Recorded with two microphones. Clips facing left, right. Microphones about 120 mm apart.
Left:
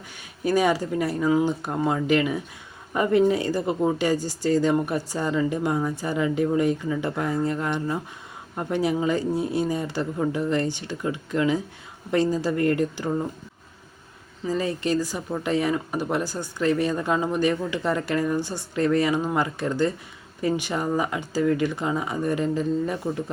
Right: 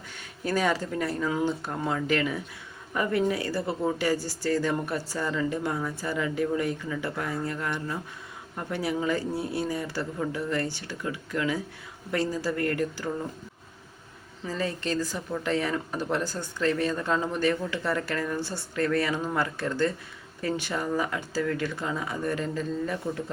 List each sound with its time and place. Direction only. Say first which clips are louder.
0.2 s speech: left 5 dB; 15° left (ahead or behind)
14.4 s speech: left 5 dB; 15° left (ahead or behind)